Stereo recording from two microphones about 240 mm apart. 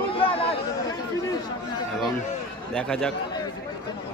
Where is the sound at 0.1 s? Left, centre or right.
Left.